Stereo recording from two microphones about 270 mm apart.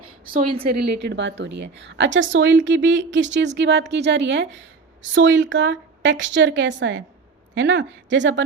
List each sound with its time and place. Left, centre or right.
0.5 s a woman's voice: right